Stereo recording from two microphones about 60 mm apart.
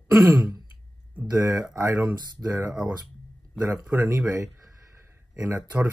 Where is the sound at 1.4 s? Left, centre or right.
Right.